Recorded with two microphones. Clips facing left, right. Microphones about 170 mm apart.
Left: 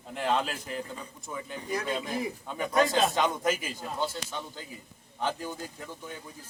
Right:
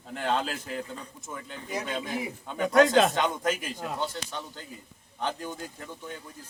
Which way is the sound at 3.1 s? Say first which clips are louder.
Even; centre (ahead or behind).